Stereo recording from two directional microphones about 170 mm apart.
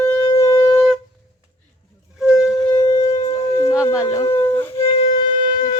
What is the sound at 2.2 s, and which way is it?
Wind instrument, 5° right (ahead or behind).